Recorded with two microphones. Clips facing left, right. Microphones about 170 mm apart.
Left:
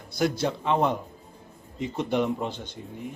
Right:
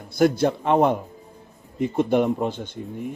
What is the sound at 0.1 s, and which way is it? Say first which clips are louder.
Speech: right 7 dB; 55° right (ahead or behind).